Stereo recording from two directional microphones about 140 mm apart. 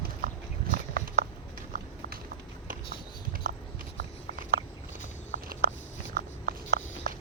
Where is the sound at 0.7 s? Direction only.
90° right.